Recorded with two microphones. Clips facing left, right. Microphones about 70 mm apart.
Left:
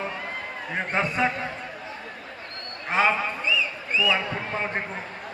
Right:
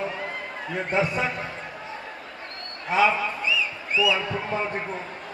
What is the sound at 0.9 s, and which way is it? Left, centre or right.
Speech, left.